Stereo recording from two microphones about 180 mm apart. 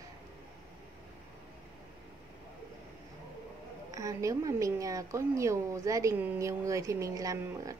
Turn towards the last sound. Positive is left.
turn(degrees=-20)  # may be behind; listen again after turning